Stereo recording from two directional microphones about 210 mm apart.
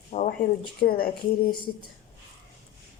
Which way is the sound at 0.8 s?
45° left (ahead or behind).